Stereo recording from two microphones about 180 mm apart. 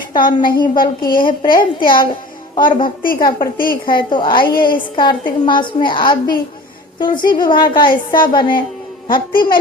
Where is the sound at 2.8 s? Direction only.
50° left (ahead or behind).